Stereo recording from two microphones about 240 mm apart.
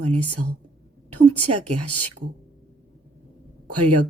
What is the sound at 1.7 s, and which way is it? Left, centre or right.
Speech, right.